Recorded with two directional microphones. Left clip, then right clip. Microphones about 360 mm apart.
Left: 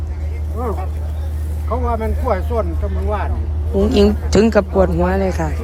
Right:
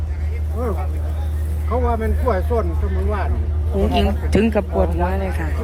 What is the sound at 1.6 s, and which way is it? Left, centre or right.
Speech, centre.